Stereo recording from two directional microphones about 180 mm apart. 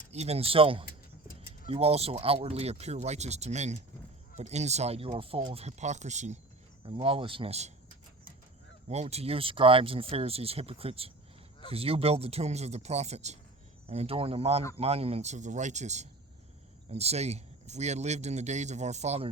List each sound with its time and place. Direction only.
0.1 s speech: 35° right (ahead or behind)
8.9 s speech: 35° right (ahead or behind)